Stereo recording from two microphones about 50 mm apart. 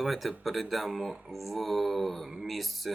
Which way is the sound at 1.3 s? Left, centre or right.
Centre.